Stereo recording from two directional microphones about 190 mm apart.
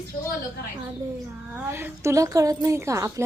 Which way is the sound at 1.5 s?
10° right (ahead or behind).